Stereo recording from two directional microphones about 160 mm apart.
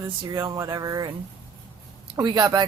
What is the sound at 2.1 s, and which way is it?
Speech, 20° right (ahead or behind).